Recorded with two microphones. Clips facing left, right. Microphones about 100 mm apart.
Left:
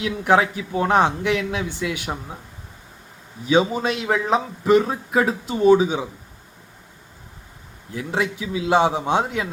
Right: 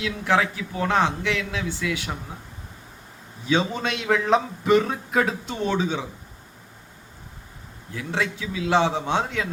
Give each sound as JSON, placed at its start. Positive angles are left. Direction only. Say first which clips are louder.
{"t": 0.0, "sound": "a man's voice", "louder": "left 4 dB", "side_deg": 20}
{"t": 3.5, "sound": "a man's voice", "louder": "left 5 dB", "side_deg": 10}
{"t": 7.9, "sound": "a man's voice", "louder": "left 3 dB", "side_deg": 15}